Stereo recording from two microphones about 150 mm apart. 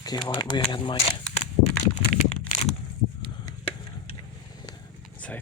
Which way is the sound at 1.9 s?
45° left (ahead or behind).